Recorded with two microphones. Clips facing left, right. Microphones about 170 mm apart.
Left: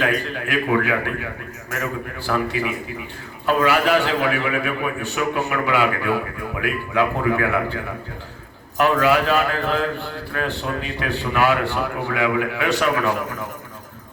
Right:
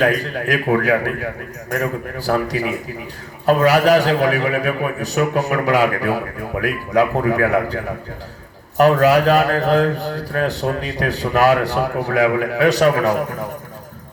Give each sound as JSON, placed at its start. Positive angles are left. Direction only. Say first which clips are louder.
{"t": 0.0, "sound": "a man's voice", "louder": "right 5 dB", "side_deg": -40}
{"t": 8.8, "sound": "a man's voice", "louder": "right 5 dB", "side_deg": -40}